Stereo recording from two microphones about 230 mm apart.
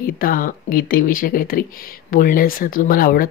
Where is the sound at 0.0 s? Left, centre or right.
Left.